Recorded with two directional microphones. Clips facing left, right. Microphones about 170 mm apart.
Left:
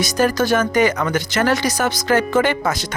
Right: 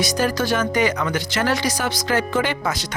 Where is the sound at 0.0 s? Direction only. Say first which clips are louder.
Left 3 dB; 50° left (ahead or behind).